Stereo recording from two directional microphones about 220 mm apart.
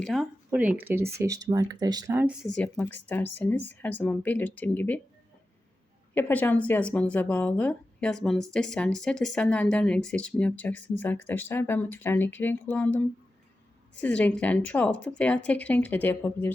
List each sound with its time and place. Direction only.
0.0 s speech: centre (ahead or behind)
2.5 s speech: 5° left (ahead or behind)
6.1 s speech: 10° left (ahead or behind)
14.0 s speech: 5° left (ahead or behind)